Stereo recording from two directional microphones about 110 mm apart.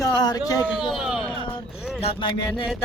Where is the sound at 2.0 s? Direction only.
55° left (ahead or behind).